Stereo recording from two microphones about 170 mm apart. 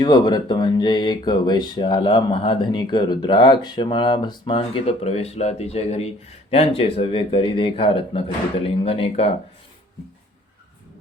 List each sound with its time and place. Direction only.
0.0 s speech: 25° left (ahead or behind)